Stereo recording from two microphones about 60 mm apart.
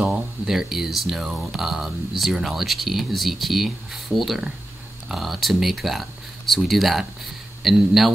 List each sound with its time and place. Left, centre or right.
0.5 s speech: centre